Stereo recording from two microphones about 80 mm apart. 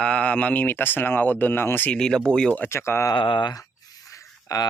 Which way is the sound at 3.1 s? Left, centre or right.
Left.